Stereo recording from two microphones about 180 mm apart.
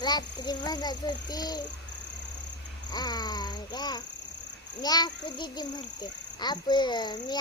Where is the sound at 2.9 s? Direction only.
20° left (ahead or behind).